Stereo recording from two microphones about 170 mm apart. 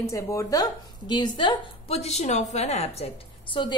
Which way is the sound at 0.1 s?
20° left (ahead or behind).